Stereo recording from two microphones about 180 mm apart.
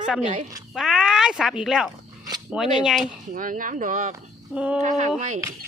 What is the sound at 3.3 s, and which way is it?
Speech, 50° right (ahead or behind).